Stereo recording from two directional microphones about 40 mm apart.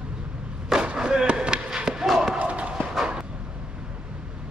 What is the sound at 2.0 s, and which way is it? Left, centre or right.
Basketball bounce, centre.